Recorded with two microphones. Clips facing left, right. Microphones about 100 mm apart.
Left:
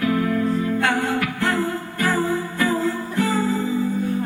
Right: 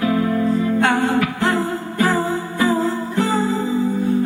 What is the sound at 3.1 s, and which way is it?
Music, 30° right (ahead or behind).